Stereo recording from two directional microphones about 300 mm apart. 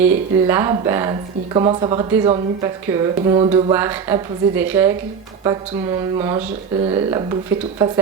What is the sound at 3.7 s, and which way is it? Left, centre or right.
Speech, centre.